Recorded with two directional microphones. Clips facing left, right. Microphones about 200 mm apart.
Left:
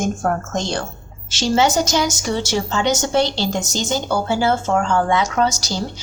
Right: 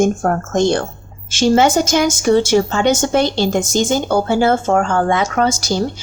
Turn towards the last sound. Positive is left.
turn(degrees=-55)  # may be behind; listen again after turning